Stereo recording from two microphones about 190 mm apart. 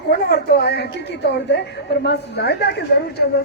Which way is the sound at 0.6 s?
60° left (ahead or behind).